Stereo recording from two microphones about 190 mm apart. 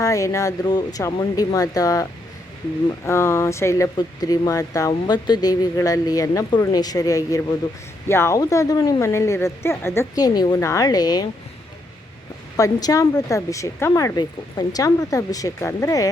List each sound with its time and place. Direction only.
0.0 s speech: 15° left (ahead or behind)
3.1 s speech: 15° left (ahead or behind)
12.5 s speech: 15° left (ahead or behind)